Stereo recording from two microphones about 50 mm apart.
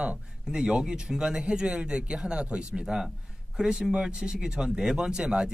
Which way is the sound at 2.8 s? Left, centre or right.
Centre.